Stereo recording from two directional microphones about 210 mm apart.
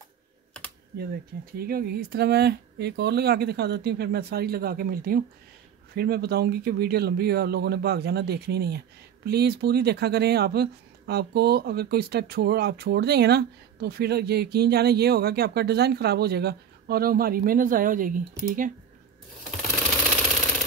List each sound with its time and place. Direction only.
0.9 s speech: 45° right (ahead or behind)